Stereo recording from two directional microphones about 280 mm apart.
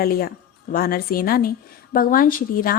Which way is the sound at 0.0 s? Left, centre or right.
Left.